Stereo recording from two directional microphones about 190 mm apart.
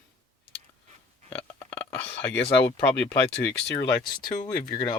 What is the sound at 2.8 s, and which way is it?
Speech, 5° left (ahead or behind).